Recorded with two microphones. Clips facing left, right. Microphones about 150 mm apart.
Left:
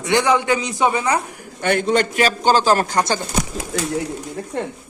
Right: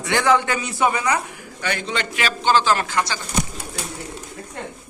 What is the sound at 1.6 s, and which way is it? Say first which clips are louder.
Speech: left 8 dB; 50° left (ahead or behind).